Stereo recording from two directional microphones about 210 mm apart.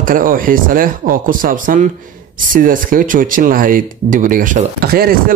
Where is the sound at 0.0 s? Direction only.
40° right (ahead or behind).